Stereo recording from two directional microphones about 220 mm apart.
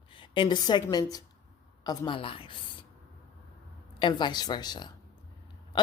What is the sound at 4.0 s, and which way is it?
Speech, 20° left (ahead or behind).